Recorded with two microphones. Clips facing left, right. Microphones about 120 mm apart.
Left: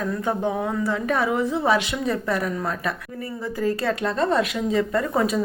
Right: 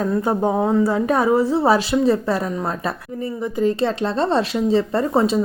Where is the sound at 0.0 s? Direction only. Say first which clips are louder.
Right 5 dB; 35° right (ahead or behind).